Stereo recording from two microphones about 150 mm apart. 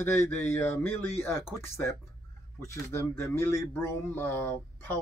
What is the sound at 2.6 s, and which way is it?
Speech, 20° left (ahead or behind).